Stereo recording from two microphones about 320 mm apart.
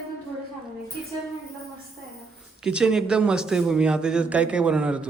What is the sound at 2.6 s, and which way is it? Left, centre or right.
A man's voice, centre.